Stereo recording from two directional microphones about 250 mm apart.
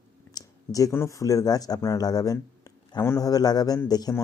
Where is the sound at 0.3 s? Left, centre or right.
Centre.